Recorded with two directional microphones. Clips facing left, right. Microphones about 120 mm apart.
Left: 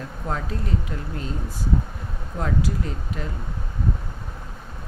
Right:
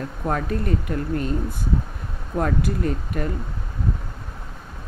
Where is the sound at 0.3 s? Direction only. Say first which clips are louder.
Right 5 dB; 55° right (ahead or behind).